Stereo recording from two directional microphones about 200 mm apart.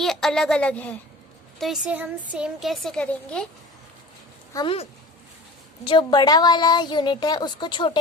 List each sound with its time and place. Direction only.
0.0 s a woman's voice: centre (ahead or behind)
4.5 s a woman's voice: 25° left (ahead or behind)